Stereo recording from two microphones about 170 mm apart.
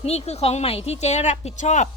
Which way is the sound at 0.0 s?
35° left (ahead or behind).